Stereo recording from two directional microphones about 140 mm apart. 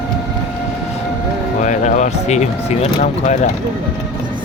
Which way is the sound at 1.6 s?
60° left (ahead or behind).